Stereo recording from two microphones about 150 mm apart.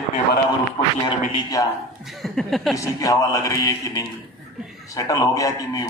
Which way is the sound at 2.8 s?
20° left (ahead or behind).